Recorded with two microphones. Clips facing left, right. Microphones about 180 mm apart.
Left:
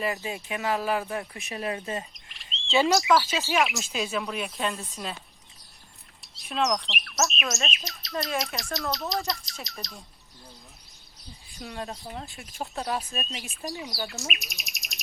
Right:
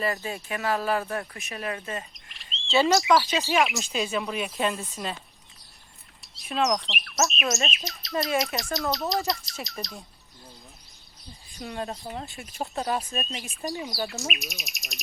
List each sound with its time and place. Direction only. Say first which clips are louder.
0.0 s speech: right 1 dB; 15° left (ahead or behind)
2.1 s bird: even; centre (ahead or behind)
2.8 s speech: right 1 dB; centre (ahead or behind)
6.2 s speech: right 1 dB; centre (ahead or behind)
11.6 s speech: right 3 dB; centre (ahead or behind)